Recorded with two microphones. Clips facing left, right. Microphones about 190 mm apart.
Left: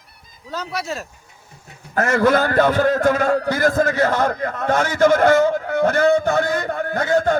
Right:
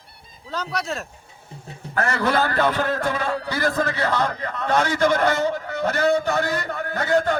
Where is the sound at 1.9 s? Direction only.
45° left (ahead or behind).